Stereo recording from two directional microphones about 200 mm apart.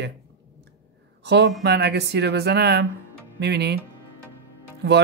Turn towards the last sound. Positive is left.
turn(degrees=-55)  # may be behind; listen again after turning